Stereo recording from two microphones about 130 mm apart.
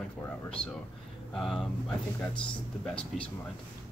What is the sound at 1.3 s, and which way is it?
Speech, centre (ahead or behind).